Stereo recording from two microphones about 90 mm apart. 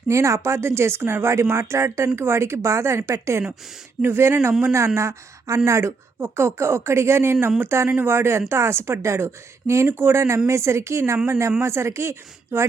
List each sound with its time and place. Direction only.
0.1 s a woman's voice: 30° right (ahead or behind)